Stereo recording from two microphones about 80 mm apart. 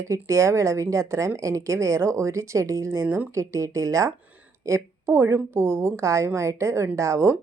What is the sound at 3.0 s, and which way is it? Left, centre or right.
Speech, right.